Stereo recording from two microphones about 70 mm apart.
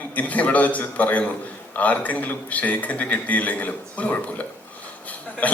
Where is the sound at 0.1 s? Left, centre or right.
Left.